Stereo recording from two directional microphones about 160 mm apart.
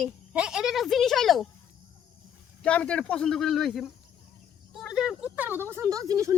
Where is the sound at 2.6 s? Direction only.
5° left (ahead or behind); by 6.3 s 20° right (ahead or behind).